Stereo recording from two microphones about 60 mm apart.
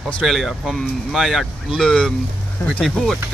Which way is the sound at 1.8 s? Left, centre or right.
Centre.